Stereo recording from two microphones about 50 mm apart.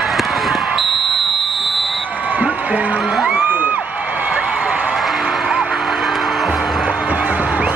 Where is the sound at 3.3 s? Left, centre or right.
Right.